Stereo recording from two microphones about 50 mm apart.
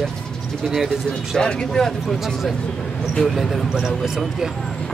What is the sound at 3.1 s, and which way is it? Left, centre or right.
Speech, centre.